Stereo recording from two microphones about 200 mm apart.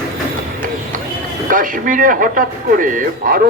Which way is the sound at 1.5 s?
45° right (ahead or behind).